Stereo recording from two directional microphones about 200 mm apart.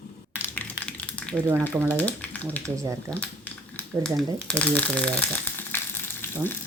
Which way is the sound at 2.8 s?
15° right (ahead or behind).